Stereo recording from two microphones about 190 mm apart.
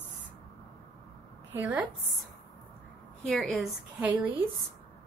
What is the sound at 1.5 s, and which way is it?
Speech, 10° right (ahead or behind).